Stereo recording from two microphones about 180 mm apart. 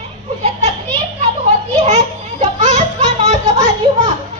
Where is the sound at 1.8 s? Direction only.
40° right (ahead or behind).